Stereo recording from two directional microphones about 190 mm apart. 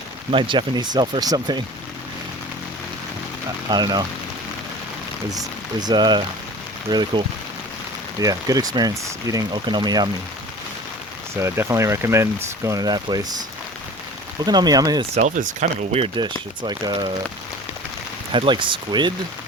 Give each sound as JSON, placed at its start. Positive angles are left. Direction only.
{"t": 0.3, "sound": "speech", "side_deg": -25}
{"t": 3.7, "sound": "speech", "side_deg": -20}
{"t": 5.3, "sound": "speech", "side_deg": -20}
{"t": 11.3, "sound": "speech", "side_deg": -15}
{"t": 14.4, "sound": "speech", "side_deg": -20}
{"t": 15.1, "sound": "speech", "side_deg": -40}
{"t": 18.3, "sound": "speech", "side_deg": -25}